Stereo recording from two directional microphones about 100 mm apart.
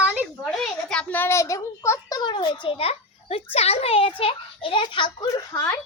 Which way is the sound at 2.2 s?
50° left (ahead or behind).